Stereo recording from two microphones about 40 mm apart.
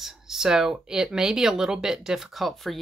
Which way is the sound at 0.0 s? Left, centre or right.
Centre.